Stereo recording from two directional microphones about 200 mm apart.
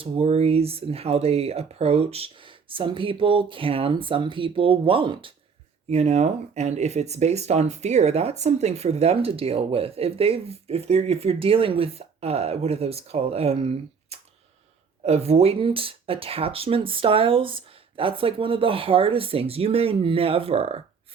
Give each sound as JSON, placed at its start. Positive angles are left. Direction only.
{"t": 0.0, "sound": "speech", "side_deg": -30}